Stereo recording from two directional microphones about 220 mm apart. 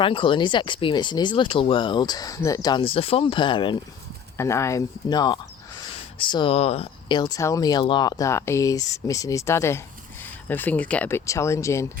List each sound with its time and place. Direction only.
0.0 s speech: 25° left (ahead or behind)